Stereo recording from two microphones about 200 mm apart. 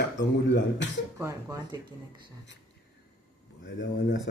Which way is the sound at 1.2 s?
15° right (ahead or behind).